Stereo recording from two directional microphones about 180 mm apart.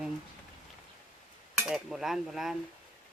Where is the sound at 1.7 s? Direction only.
5° right (ahead or behind).